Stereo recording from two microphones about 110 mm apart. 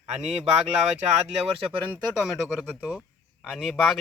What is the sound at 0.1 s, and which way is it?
Speech, 90° right.